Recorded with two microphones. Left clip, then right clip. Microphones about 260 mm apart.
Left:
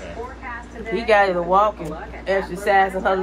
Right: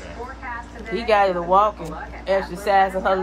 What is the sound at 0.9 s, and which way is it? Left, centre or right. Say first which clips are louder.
A woman's voice: left 1 dB; centre.